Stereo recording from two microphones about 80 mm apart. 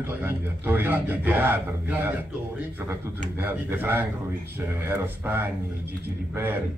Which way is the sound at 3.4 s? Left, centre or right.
Right.